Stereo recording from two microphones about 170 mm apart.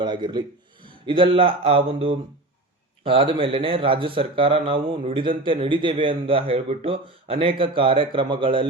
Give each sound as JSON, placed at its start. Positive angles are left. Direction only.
{"t": 0.0, "sound": "speech", "side_deg": -25}